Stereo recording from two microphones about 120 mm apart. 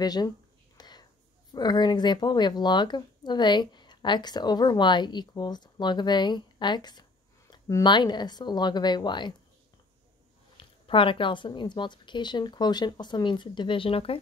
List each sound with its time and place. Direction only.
0.0 s speech: 35° left (ahead or behind)
0.7 s whispering: 35° left (ahead or behind)
1.5 s speech: 35° left (ahead or behind)
10.6 s speech: 45° left (ahead or behind)